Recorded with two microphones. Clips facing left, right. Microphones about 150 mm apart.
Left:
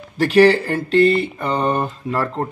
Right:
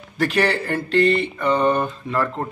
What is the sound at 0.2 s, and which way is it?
Speech, 35° left (ahead or behind).